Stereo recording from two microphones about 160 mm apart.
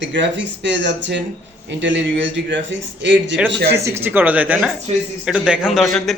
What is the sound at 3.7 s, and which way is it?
A man's voice, 15° right (ahead or behind).